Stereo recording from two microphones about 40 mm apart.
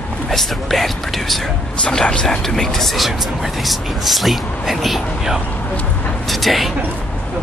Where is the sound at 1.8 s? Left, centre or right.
Left.